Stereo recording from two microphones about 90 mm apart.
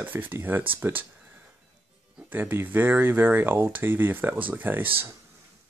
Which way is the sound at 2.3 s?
25° right (ahead or behind).